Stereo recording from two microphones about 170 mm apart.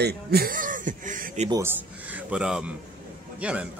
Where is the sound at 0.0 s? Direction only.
65° right (ahead or behind); by 1.5 s 45° right (ahead or behind).